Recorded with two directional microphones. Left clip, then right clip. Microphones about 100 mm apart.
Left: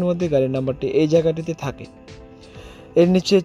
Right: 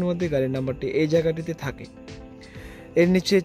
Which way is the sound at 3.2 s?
25° left (ahead or behind).